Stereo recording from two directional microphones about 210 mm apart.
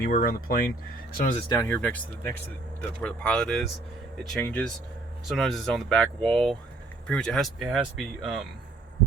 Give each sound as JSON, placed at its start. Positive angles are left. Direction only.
{"t": 0.0, "sound": "speech", "side_deg": 45}
{"t": 1.5, "sound": "speech", "side_deg": 15}